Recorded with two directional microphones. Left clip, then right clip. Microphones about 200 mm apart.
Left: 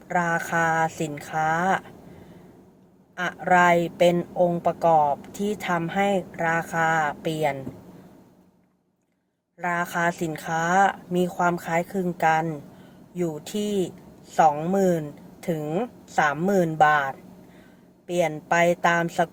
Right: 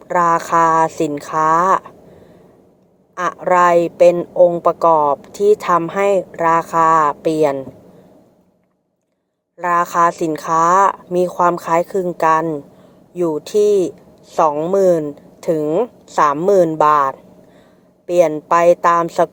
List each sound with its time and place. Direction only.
0.1 s a woman's voice: 25° right (ahead or behind)
3.2 s a woman's voice: 25° right (ahead or behind)
9.6 s a woman's voice: 25° right (ahead or behind)